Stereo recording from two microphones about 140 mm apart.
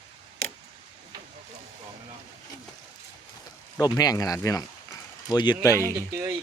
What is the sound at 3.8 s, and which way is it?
Speech, 30° left (ahead or behind).